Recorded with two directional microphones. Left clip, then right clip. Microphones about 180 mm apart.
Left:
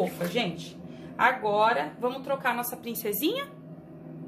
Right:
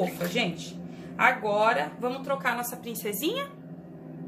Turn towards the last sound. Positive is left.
turn(degrees=25)  # may be behind; listen again after turning